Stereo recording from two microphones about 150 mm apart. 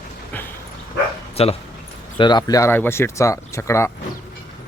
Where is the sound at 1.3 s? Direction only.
45° left (ahead or behind).